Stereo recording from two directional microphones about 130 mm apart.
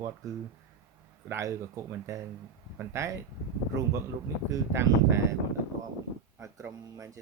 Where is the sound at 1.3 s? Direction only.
25° right (ahead or behind).